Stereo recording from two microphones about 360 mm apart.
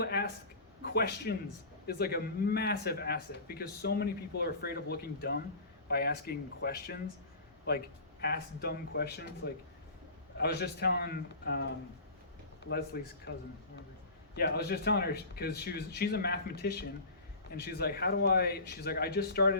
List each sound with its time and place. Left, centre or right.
0.0 s a sound: left
0.9 s speech: left
8.2 s speech: left
10.3 s speech: left
14.3 s speech: left